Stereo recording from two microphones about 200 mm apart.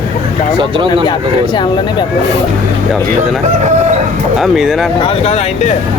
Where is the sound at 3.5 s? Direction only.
35° right (ahead or behind).